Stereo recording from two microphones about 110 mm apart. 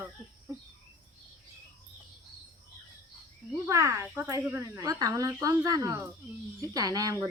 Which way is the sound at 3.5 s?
25° right (ahead or behind).